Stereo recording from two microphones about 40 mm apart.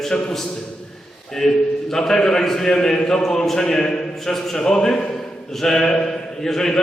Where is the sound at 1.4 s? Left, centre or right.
Centre.